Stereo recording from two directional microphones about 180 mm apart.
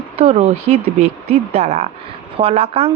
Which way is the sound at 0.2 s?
35° right (ahead or behind).